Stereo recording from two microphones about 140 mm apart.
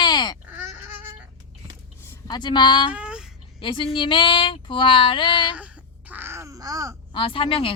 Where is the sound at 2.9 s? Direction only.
10° right (ahead or behind).